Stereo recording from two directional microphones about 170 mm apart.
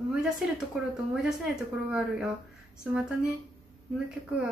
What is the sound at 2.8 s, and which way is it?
Speech, 5° right (ahead or behind).